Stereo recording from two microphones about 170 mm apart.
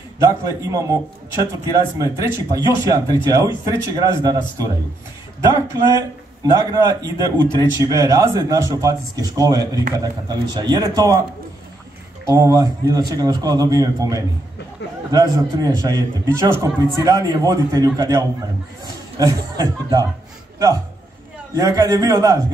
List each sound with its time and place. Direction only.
0.2 s speech: 20° right (ahead or behind)
2.0 s speech: 20° right (ahead or behind)
6.5 s speech: 20° right (ahead or behind)
12.3 s a man's voice: 20° right (ahead or behind)